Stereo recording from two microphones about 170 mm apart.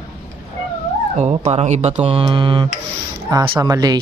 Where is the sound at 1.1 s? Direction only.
40° right (ahead or behind); by 3.9 s 20° right (ahead or behind).